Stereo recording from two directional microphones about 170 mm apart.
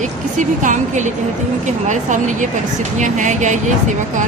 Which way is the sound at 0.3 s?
50° right (ahead or behind).